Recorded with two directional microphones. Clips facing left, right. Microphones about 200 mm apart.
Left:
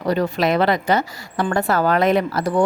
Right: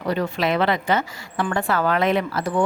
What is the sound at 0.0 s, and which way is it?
Speech, 40° left (ahead or behind).